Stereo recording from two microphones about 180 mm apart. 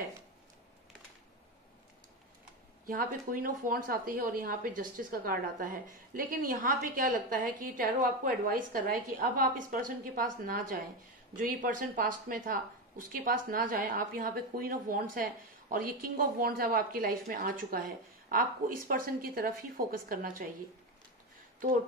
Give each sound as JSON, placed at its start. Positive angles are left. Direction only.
{"t": 2.9, "sound": "a woman's voice", "side_deg": -55}